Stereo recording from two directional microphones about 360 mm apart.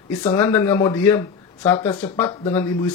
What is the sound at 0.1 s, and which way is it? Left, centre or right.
Speech, centre.